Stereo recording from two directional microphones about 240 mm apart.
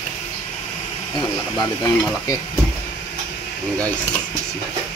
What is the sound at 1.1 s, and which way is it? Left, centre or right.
Speech, centre.